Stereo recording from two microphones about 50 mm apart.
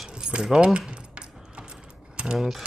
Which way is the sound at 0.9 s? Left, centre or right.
Right.